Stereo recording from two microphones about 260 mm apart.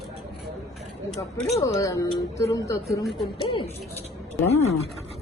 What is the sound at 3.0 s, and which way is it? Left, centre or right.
Speech, centre.